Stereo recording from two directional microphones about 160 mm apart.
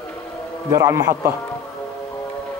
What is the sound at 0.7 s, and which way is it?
Speech, 20° right (ahead or behind).